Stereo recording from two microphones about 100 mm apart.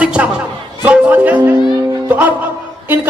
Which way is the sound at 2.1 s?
15° right (ahead or behind).